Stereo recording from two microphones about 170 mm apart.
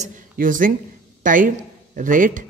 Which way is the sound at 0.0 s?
55° right (ahead or behind).